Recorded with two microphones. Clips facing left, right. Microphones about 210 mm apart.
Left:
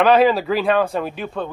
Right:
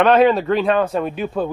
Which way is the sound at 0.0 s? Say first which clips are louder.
Right 1 dB; centre (ahead or behind).